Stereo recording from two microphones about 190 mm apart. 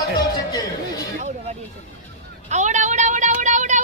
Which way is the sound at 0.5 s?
20° left (ahead or behind).